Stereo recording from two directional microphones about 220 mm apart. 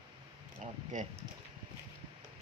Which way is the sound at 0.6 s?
35° right (ahead or behind).